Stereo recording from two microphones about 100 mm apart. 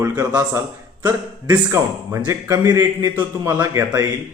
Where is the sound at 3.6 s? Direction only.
35° right (ahead or behind).